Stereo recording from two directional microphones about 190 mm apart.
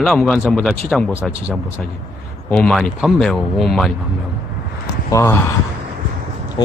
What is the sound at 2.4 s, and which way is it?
A man's voice, 5° left (ahead or behind).